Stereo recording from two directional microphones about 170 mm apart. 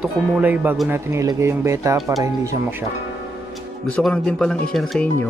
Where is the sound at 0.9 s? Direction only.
15° right (ahead or behind).